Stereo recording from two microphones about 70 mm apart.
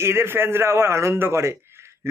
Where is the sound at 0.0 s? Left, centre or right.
Right.